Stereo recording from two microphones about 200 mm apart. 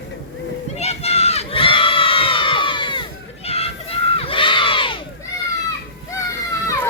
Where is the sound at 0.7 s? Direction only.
30° left (ahead or behind).